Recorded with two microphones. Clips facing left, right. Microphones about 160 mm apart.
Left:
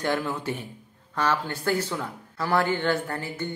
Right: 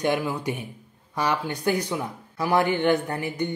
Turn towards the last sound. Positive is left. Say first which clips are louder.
# right 4 dB
turn(degrees=-15)  # may be behind; listen again after turning